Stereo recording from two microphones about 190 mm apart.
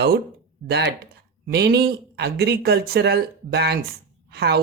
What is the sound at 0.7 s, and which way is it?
Speech, 60° right (ahead or behind).